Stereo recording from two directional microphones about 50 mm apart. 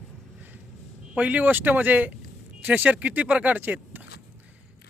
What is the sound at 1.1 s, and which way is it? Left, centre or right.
A man's voice, right.